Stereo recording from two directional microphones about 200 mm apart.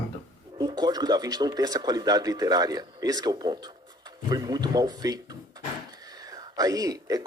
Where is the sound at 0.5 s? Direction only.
20° right (ahead or behind).